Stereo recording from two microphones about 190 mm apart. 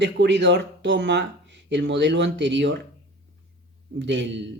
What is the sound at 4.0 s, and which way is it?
Speech, 70° right (ahead or behind).